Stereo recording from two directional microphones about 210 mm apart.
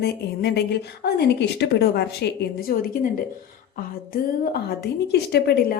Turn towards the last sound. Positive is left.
turn(degrees=50)  # may be behind; listen again after turning